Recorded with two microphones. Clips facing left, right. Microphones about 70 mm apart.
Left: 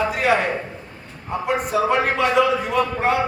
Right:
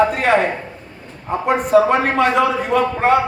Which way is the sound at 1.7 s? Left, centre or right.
Right.